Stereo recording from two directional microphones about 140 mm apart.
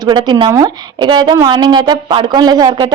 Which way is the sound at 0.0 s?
30° right (ahead or behind).